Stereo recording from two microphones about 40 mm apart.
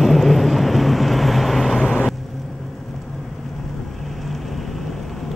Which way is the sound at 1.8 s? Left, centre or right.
Left.